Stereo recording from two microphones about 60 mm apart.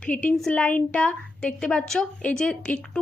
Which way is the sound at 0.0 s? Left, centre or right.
Left.